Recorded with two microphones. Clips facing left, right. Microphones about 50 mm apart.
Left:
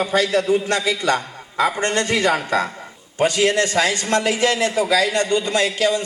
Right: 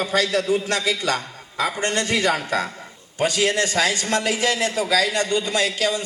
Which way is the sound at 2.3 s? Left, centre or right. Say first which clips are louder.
Left 3 dB; left.